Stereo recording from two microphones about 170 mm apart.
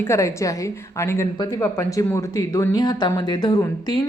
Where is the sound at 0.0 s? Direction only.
15° left (ahead or behind).